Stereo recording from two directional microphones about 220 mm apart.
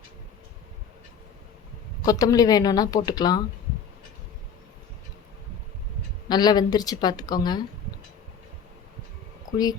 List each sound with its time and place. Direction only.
2.0 s speech: 15° left (ahead or behind)
6.2 s speech: 20° left (ahead or behind)